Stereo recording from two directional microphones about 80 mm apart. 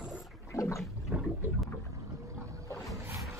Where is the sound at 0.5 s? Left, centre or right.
Left.